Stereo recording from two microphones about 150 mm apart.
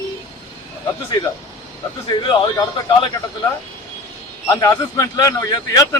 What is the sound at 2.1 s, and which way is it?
Speech, 30° left (ahead or behind).